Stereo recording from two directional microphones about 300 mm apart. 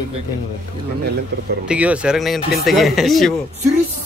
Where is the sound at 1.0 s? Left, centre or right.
Right.